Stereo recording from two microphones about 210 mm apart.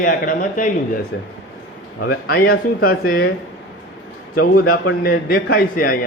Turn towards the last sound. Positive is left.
turn(degrees=45)  # may be behind; listen again after turning